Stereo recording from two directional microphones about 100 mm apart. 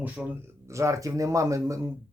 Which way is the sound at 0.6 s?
30° right (ahead or behind).